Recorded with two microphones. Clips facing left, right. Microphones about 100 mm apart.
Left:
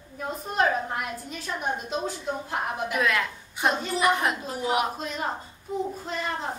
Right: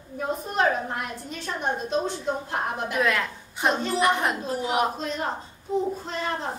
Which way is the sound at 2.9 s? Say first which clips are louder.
Right 1 dB; centre (ahead or behind).